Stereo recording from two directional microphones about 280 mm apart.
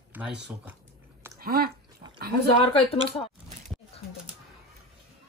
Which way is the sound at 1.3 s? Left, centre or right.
Right.